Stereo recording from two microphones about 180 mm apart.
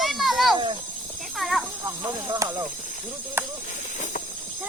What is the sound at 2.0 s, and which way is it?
Snake, 20° right (ahead or behind).